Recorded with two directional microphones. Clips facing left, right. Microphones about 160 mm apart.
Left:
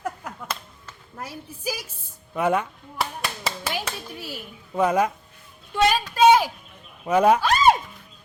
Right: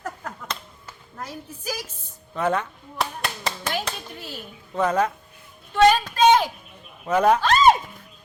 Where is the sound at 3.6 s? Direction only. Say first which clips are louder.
Right 1 dB; 5° left (ahead or behind).